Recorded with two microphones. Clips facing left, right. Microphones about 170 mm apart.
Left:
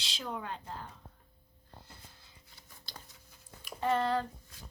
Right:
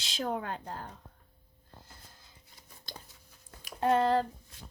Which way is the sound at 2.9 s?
50° right (ahead or behind).